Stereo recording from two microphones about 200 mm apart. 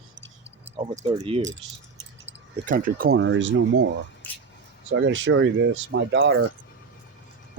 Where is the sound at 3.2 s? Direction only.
65° right (ahead or behind).